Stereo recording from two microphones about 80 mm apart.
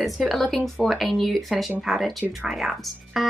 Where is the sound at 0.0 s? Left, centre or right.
Centre.